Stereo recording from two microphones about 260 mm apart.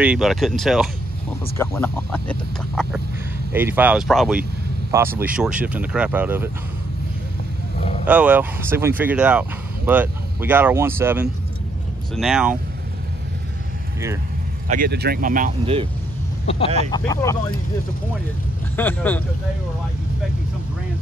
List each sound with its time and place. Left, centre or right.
0.0 s speech: centre
8.1 s speech: centre
14.7 s speech: right
15.6 s speech: right
16.4 s speech: left
18.8 s speech: centre